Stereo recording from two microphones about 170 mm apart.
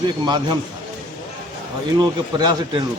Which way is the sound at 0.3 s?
25° right (ahead or behind).